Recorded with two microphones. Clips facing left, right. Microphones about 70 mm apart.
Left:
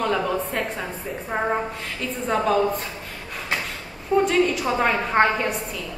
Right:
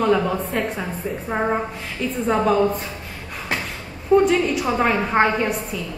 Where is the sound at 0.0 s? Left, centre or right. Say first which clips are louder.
Right 4 dB; centre.